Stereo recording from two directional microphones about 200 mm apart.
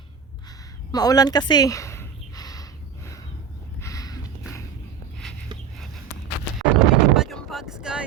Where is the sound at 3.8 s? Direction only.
15° left (ahead or behind).